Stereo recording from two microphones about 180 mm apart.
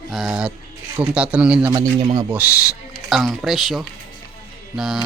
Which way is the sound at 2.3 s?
10° right (ahead or behind).